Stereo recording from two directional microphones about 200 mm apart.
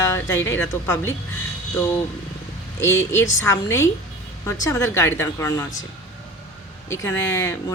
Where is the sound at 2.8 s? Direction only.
15° left (ahead or behind).